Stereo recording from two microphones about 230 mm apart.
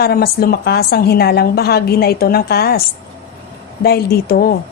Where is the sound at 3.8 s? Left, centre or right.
Left.